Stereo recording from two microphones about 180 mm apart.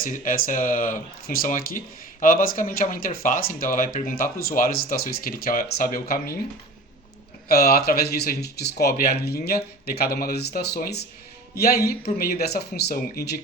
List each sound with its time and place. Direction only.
0.0 s speech: 50° left (ahead or behind)
7.4 s speech: 60° left (ahead or behind)